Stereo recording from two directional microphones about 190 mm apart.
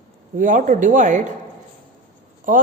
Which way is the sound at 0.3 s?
45° right (ahead or behind).